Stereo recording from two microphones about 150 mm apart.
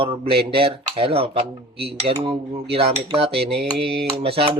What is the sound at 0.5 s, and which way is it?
Speech, 35° right (ahead or behind).